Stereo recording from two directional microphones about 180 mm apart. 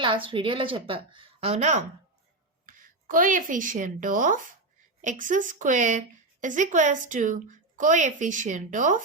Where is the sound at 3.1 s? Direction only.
50° right (ahead or behind).